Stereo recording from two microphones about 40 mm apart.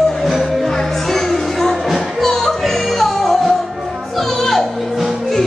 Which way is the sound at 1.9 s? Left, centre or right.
Centre.